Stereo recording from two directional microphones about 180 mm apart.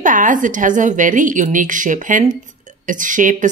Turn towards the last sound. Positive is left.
turn(degrees=-45)  # may be behind; listen again after turning